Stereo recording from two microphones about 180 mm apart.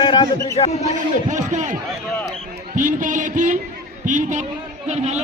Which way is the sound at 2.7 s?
45° right (ahead or behind).